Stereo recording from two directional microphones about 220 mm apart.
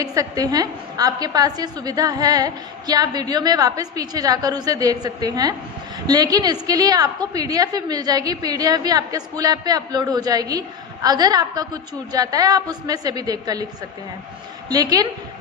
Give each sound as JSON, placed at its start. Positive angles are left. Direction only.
{"t": 0.0, "sound": "a woman's voice", "side_deg": -15}
{"t": 14.7, "sound": "a woman's voice", "side_deg": -15}